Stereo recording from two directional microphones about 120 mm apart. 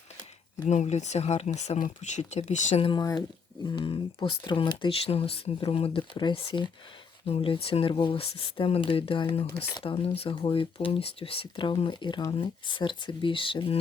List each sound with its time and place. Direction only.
0.6 s speech: 75° left (ahead or behind)
3.0 s speech: 30° left (ahead or behind)
3.8 s speech: 45° left (ahead or behind)